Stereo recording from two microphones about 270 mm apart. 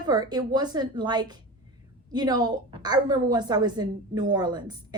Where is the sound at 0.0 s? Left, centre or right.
Centre.